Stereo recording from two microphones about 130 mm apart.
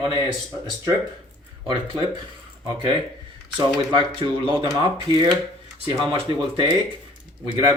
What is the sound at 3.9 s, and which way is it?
Speech, 40° right (ahead or behind).